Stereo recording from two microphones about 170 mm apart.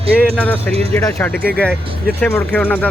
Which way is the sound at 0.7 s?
35° right (ahead or behind).